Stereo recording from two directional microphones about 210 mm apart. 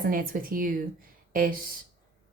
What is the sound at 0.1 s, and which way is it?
A woman's voice, 40° right (ahead or behind).